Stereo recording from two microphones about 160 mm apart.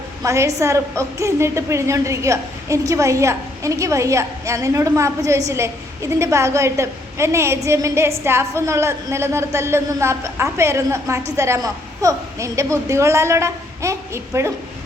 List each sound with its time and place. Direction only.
0.2 s a woman's voice: 20° right (ahead or behind)